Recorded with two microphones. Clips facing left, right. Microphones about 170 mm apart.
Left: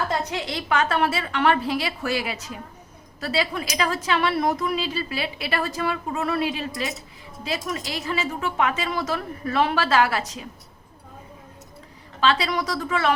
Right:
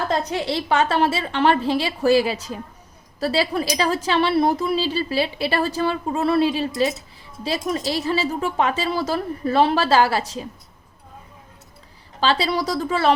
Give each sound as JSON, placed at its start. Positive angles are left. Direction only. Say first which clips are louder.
{"t": 0.1, "sound": "a woman's voice", "louder": "right 4 dB", "side_deg": -30}
{"t": 12.2, "sound": "a woman's voice", "louder": "right 2 dB", "side_deg": -30}